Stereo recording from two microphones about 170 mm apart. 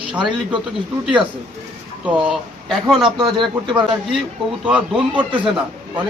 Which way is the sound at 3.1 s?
25° right (ahead or behind).